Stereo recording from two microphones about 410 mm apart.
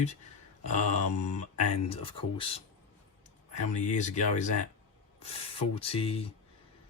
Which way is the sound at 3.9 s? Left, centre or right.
Centre.